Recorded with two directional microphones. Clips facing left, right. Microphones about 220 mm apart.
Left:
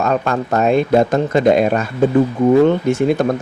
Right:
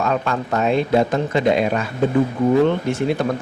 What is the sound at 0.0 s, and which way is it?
Speech, 45° left (ahead or behind).